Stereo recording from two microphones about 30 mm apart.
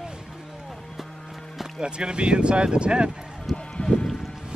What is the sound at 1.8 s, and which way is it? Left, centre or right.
Speech, right.